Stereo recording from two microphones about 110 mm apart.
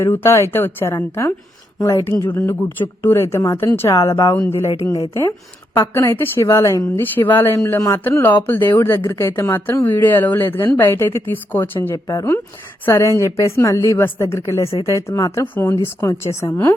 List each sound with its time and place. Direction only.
0.0 s speech: 20° left (ahead or behind)
4.7 s speech: 30° left (ahead or behind)